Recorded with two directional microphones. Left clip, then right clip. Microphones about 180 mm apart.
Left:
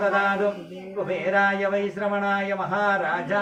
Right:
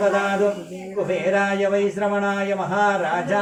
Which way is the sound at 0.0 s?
20° right (ahead or behind).